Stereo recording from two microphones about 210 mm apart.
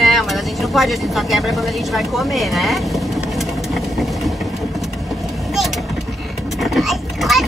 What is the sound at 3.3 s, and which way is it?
Vehicle, centre (ahead or behind).